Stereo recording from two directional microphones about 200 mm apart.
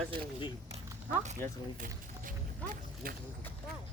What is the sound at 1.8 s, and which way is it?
Music, 45° right (ahead or behind).